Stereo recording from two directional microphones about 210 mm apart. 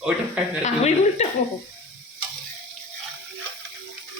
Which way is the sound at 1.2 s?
30° left (ahead or behind).